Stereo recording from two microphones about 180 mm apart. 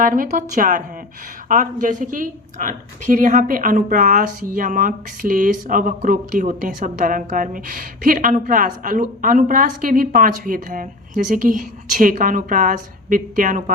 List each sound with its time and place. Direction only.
0.0 s a woman's voice: 50° right (ahead or behind)